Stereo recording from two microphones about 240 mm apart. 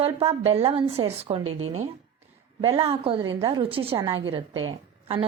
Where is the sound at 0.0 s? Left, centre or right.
Right.